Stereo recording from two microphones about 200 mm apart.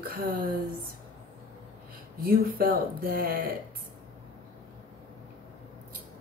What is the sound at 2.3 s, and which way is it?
Speech, 45° right (ahead or behind).